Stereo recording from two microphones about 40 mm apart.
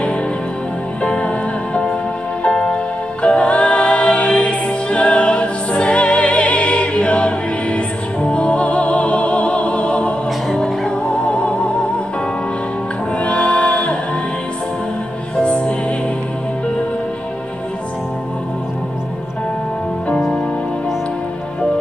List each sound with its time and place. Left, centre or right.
1.0 s music: left
10.5 s music: centre
11.1 s music: left
13.2 s music: left
15.3 s music: left